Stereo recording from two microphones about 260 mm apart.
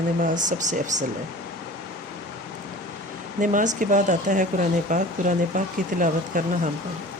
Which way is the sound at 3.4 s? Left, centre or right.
Right.